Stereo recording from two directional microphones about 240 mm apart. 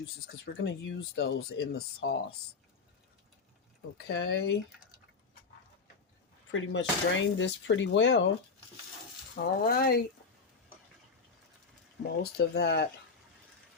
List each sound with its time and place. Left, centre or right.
0.4 s speech: left
3.9 s speech: left
6.5 s speech: left
9.3 s speech: left
12.2 s speech: left